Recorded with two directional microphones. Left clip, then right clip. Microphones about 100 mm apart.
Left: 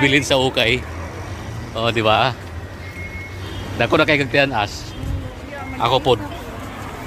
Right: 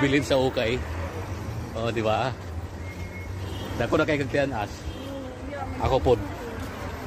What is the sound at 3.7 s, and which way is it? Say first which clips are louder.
Speech: left 8 dB; 25° left (ahead or behind).